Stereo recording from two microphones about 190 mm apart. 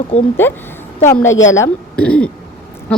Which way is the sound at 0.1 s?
40° left (ahead or behind).